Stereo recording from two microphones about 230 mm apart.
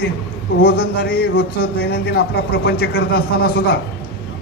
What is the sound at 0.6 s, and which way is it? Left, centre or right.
A man's voice, left.